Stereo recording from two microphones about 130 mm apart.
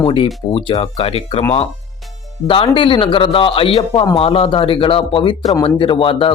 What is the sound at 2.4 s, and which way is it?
Speech, 40° left (ahead or behind).